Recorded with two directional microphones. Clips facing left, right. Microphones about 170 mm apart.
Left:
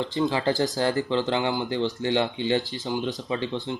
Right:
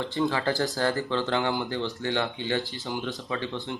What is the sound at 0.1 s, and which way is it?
Speech, 20° left (ahead or behind).